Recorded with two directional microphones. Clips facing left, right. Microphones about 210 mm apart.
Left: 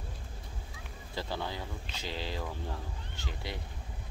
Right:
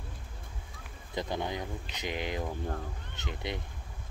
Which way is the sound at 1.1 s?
20° right (ahead or behind).